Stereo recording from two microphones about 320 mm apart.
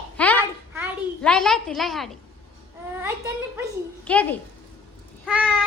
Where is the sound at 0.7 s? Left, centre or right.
Centre.